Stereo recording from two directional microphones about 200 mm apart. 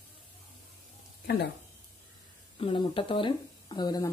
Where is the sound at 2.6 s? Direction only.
25° left (ahead or behind).